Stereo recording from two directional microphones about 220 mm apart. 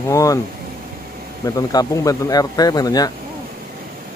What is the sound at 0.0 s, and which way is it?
Speech, 15° left (ahead or behind).